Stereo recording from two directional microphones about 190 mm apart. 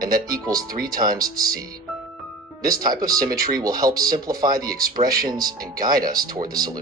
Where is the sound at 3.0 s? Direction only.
50° right (ahead or behind).